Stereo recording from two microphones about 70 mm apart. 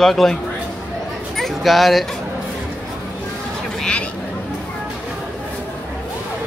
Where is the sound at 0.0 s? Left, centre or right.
Centre.